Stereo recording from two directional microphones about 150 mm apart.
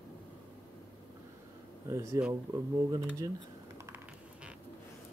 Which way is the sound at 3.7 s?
20° right (ahead or behind).